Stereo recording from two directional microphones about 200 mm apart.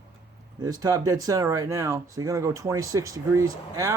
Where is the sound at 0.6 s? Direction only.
15° right (ahead or behind).